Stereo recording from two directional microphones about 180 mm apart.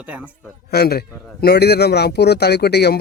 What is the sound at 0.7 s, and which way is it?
A man's voice, 60° left (ahead or behind).